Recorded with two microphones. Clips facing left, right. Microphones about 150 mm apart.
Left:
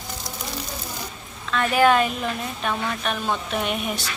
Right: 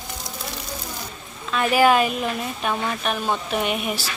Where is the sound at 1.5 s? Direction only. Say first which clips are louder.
Right 1 dB; 10° right (ahead or behind).